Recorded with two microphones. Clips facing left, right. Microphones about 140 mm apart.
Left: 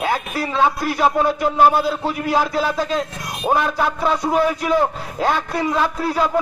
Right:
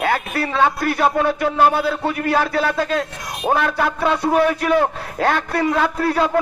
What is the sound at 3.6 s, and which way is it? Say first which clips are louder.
Speech: even; 10° left (ahead or behind).